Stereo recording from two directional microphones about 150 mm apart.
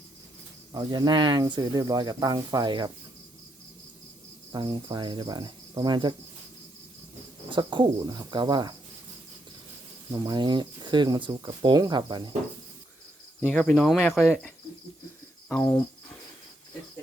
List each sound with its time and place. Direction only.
0.7 s speech: 25° right (ahead or behind)
4.5 s speech: 30° right (ahead or behind)
7.5 s speech: 30° right (ahead or behind)
10.1 s speech: 30° right (ahead or behind)
13.5 s cricket: 5° left (ahead or behind)
15.4 s cricket: 10° left (ahead or behind)